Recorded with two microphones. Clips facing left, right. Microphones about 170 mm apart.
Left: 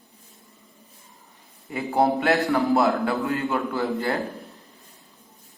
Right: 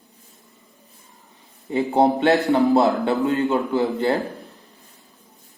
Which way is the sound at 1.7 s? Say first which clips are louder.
Right 4 dB; 20° right (ahead or behind).